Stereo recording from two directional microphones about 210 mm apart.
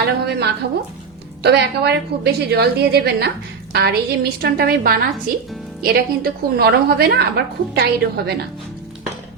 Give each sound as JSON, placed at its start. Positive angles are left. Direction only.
{"t": 0.0, "sound": "a woman's voice", "side_deg": -50}